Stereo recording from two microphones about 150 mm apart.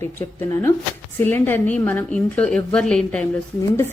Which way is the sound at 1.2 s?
15° left (ahead or behind).